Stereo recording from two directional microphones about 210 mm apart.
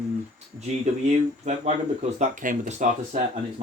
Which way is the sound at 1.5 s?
35° right (ahead or behind).